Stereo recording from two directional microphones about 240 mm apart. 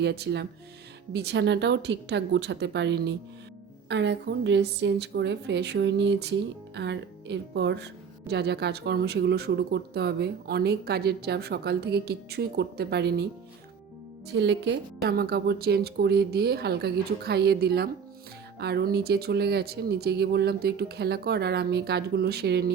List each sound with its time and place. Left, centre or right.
0.0 s speech: right
14.3 s a woman's voice: right